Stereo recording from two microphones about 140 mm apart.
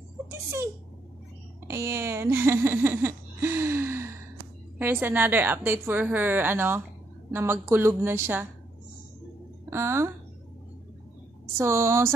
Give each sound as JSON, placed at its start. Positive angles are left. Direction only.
{"t": 1.7, "sound": "a woman's voice", "side_deg": -20}
{"t": 9.7, "sound": "a woman's voice", "side_deg": -20}
{"t": 11.5, "sound": "a woman's voice", "side_deg": -20}